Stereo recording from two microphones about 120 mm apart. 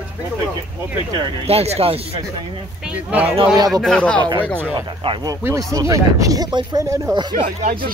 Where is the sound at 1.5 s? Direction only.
55° right (ahead or behind).